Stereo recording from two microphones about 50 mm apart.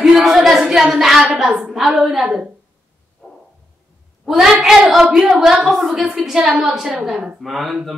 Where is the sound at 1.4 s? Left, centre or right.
Centre.